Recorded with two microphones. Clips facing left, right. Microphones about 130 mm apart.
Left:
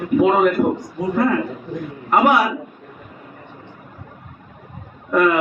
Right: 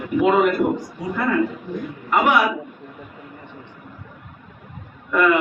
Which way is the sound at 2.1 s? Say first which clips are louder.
Left 3 dB; 40° left (ahead or behind).